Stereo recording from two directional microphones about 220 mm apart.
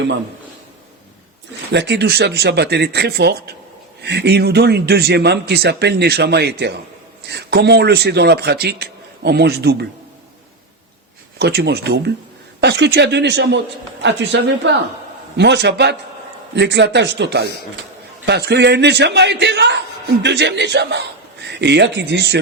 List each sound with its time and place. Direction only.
1.7 s a man's voice: 50° right (ahead or behind)
11.3 s a man's voice: 50° right (ahead or behind)